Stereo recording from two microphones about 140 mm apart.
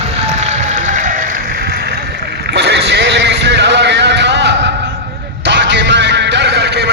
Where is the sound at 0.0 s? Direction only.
50° right (ahead or behind); by 2.0 s 90° right.